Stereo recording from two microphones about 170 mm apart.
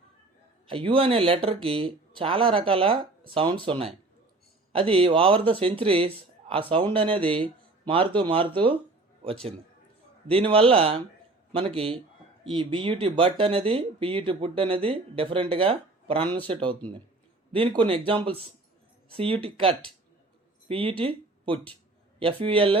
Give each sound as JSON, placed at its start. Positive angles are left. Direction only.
{"t": 0.7, "sound": "speech", "side_deg": -30}
{"t": 10.2, "sound": "speech", "side_deg": -35}